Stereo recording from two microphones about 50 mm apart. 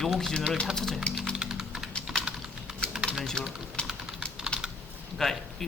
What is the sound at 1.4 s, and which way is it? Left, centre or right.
Typing, centre.